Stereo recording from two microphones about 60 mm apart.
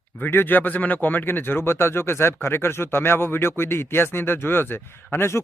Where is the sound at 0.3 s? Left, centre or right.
Left.